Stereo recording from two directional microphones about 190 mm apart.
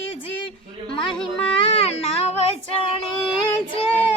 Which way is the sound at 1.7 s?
30° left (ahead or behind).